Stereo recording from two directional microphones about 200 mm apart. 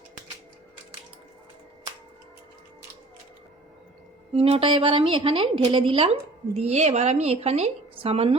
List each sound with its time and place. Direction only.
4.4 s a woman's voice: 25° right (ahead or behind)